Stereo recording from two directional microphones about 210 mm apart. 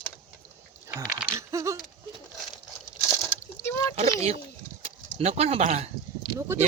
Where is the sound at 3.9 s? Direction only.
30° right (ahead or behind).